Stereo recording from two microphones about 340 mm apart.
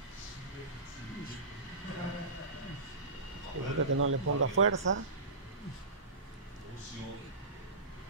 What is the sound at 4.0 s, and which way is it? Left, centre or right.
Speech, right.